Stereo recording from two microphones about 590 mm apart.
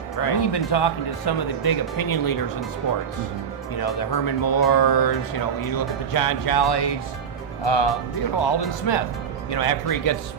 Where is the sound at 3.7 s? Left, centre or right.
Left.